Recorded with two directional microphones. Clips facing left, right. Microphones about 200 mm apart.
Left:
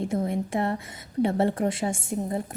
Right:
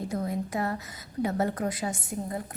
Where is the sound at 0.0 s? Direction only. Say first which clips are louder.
Left 4 dB; 25° left (ahead or behind).